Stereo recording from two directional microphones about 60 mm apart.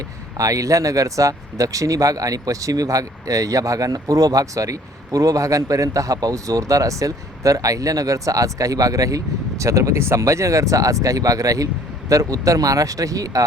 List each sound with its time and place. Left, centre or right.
0.3 s speech: right